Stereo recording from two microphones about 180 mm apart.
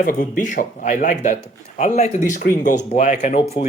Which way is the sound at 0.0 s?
50° left (ahead or behind).